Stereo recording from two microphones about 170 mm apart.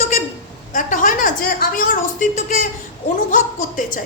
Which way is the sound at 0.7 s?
50° left (ahead or behind).